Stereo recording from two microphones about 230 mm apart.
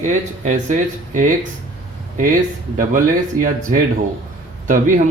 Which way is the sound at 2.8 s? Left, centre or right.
Right.